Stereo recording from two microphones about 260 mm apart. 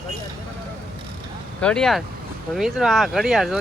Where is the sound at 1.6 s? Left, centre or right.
Centre.